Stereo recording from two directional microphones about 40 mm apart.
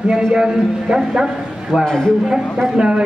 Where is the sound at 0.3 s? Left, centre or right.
Centre.